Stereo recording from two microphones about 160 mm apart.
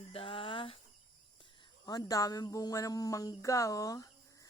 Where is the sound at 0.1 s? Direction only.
35° left (ahead or behind).